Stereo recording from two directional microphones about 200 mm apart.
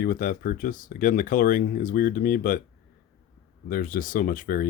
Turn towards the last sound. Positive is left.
turn(degrees=40)  # may be behind; listen again after turning